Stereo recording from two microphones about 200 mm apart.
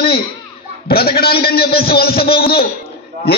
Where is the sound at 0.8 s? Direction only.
50° left (ahead or behind).